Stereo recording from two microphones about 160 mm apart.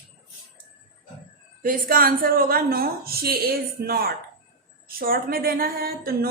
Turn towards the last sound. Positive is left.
turn(degrees=-70)  # may be behind; listen again after turning